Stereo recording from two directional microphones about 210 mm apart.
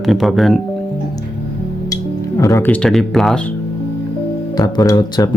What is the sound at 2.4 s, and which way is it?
Speech, 15° left (ahead or behind).